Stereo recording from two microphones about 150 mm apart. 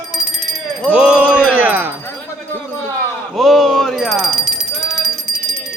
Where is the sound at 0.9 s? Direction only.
5° right (ahead or behind).